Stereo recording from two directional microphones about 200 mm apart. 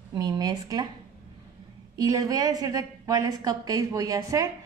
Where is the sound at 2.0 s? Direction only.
15° right (ahead or behind).